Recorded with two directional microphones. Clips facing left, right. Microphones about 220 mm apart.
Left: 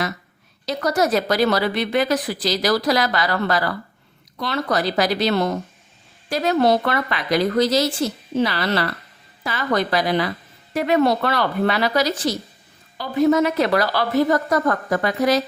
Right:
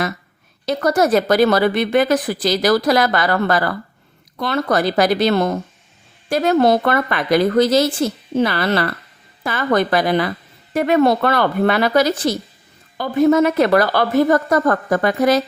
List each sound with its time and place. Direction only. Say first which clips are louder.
0.6 s speech: right 4 dB; 50° right (ahead or behind)